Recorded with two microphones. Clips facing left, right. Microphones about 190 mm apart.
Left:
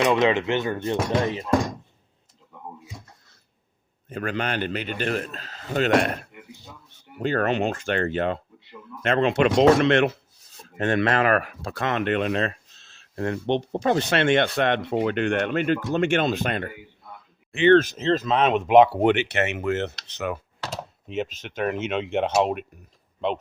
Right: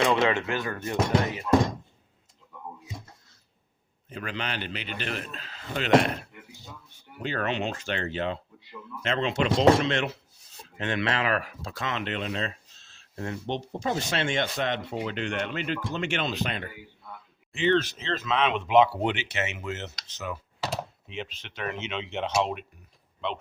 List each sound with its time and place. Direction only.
0.0 s speech: 20° left (ahead or behind)
4.1 s a man's voice: 50° left (ahead or behind)
7.2 s a man's voice: 45° left (ahead or behind)
10.8 s speech: 50° left (ahead or behind)
17.5 s speech: 60° left (ahead or behind)
21.1 s a man's voice: 45° left (ahead or behind)